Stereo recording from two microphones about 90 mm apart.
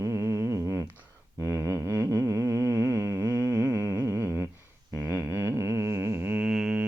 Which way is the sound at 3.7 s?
35° right (ahead or behind).